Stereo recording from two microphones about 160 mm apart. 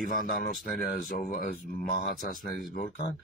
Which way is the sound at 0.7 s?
60° left (ahead or behind).